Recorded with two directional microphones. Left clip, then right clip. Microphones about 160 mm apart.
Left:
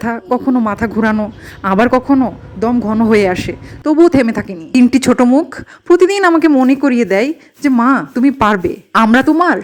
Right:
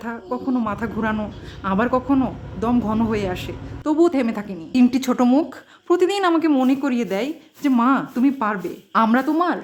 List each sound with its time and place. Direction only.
0.0 s a woman's voice: 45° left (ahead or behind)
2.1 s a woman's voice: 30° left (ahead or behind)
3.1 s speech: 50° left (ahead or behind)
3.8 s a woman's voice: 35° left (ahead or behind)
8.4 s a woman's voice: 50° left (ahead or behind)